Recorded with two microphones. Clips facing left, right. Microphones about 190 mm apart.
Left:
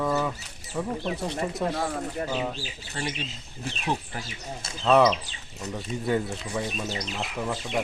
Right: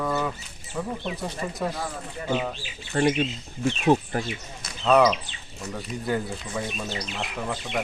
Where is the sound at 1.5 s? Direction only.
Centre (ahead or behind).